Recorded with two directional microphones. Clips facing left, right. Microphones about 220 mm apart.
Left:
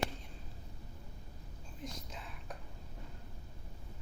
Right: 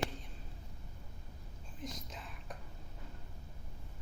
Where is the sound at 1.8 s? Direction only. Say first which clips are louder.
Right 1 dB; centre (ahead or behind).